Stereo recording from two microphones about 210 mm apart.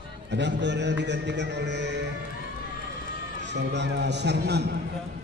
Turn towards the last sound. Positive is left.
turn(degrees=-50)  # may be behind; listen again after turning